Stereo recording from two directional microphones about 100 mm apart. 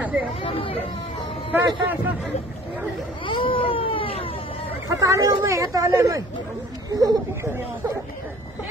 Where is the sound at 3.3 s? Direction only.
60° left (ahead or behind).